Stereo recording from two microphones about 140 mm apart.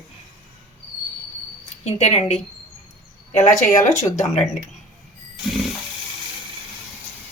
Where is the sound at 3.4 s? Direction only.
55° left (ahead or behind).